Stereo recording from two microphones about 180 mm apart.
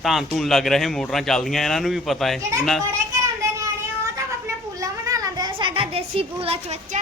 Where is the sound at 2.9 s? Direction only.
15° right (ahead or behind).